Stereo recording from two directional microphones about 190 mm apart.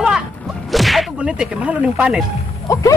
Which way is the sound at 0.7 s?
Centre (ahead or behind).